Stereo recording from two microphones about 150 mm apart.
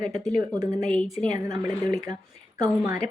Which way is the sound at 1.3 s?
20° right (ahead or behind).